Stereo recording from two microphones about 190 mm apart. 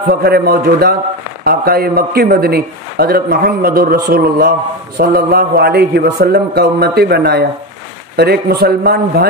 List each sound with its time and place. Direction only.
0.0 s a man's voice: 55° right (ahead or behind)